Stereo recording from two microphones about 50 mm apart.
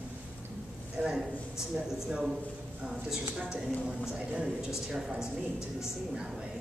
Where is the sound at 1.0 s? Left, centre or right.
Right.